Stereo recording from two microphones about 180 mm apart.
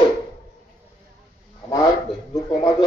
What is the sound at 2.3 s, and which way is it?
Speech, 20° left (ahead or behind).